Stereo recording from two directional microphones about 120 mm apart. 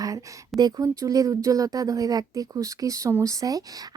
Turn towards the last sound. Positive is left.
turn(degrees=-30)  # may be behind; listen again after turning